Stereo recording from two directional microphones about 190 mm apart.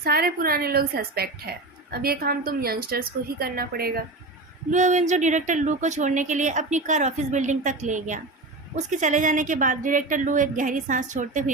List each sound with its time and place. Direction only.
0.0 s a woman's voice: 55° right (ahead or behind)
4.7 s a woman's voice: 40° right (ahead or behind)